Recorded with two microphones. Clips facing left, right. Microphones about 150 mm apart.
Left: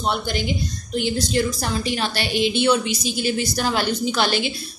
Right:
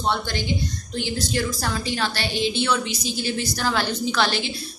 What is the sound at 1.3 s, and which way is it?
A woman's voice, 20° left (ahead or behind).